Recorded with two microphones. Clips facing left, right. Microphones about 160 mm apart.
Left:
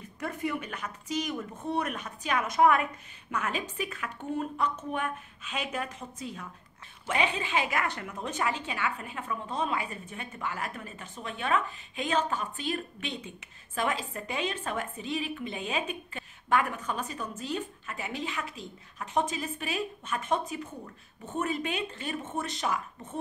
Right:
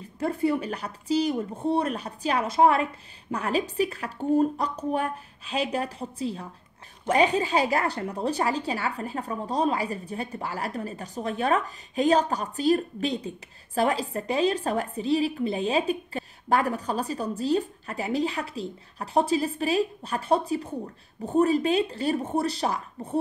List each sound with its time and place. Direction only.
0.0 s a woman's voice: 30° right (ahead or behind)